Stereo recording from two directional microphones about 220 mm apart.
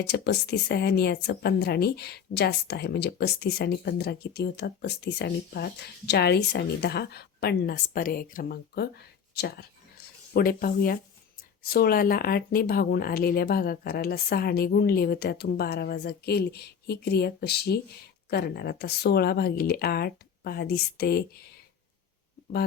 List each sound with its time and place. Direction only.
0.0 s a woman's voice: 45° left (ahead or behind)